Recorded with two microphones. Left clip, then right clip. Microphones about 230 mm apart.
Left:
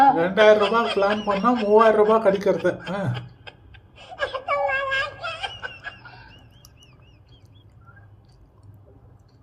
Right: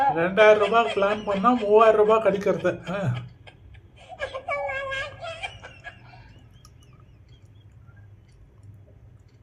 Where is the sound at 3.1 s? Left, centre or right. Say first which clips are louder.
Left 4 dB; left.